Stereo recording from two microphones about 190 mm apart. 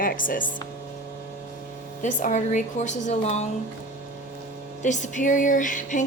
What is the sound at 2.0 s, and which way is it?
A woman's voice, 40° left (ahead or behind).